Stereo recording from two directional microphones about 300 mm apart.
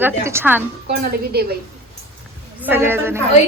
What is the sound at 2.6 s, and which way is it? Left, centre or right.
Speech, centre.